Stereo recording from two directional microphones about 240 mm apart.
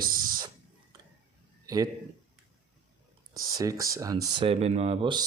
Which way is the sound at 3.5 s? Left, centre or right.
Centre.